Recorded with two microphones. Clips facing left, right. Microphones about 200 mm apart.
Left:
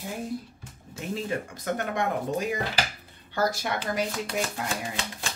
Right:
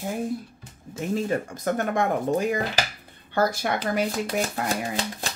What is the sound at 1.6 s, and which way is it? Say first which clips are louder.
Speech: right 4 dB; 50° right (ahead or behind).